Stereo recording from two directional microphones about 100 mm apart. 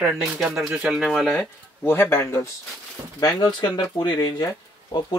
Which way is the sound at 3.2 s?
40° left (ahead or behind).